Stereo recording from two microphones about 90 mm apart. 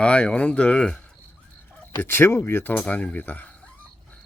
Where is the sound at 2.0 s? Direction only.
25° left (ahead or behind).